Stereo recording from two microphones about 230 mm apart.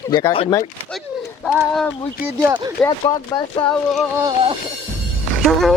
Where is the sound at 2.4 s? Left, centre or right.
Centre.